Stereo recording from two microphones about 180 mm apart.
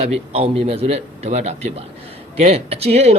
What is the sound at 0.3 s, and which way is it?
Speech, 35° right (ahead or behind).